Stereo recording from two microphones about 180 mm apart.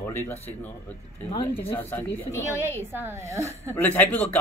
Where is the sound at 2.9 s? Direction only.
10° right (ahead or behind).